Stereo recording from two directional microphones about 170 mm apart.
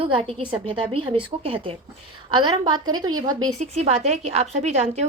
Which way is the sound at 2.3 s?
25° right (ahead or behind).